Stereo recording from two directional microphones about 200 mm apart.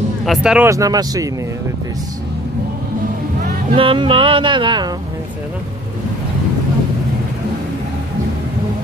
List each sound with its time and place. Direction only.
0.2 s speech: centre (ahead or behind)
0.7 s speech: 15° right (ahead or behind)
3.7 s speech: 25° right (ahead or behind)